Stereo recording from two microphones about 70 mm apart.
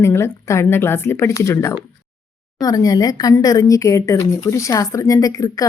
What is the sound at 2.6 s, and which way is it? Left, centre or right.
A woman's voice, left.